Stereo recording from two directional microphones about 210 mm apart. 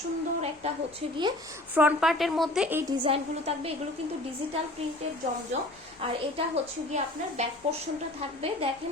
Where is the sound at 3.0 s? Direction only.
30° right (ahead or behind).